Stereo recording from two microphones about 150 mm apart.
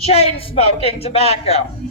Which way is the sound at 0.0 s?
45° left (ahead or behind).